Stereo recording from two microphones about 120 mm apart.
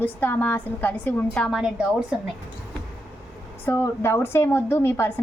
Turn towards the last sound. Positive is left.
turn(degrees=20)  # may be behind; listen again after turning